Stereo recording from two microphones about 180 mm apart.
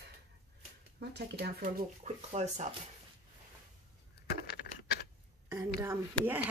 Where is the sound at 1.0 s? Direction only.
65° right (ahead or behind).